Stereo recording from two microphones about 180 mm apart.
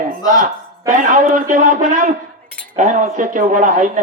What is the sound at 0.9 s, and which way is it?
Speech, 45° right (ahead or behind).